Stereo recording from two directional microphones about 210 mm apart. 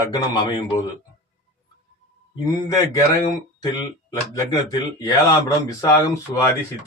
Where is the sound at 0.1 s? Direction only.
20° left (ahead or behind).